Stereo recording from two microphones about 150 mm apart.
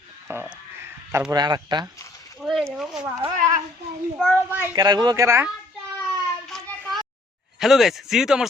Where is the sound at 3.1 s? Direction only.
20° right (ahead or behind).